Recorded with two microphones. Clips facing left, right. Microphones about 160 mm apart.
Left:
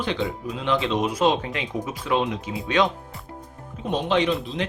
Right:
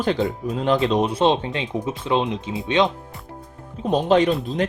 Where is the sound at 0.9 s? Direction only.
30° right (ahead or behind).